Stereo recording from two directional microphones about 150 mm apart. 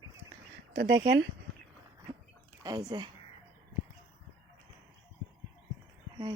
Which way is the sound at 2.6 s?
25° right (ahead or behind).